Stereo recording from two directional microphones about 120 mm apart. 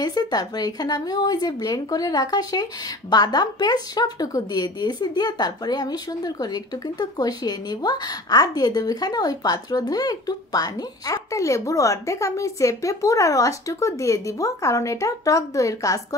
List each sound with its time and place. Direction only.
0.0 s speech: 35° left (ahead or behind)